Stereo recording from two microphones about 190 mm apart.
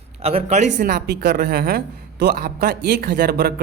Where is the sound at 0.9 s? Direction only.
60° right (ahead or behind).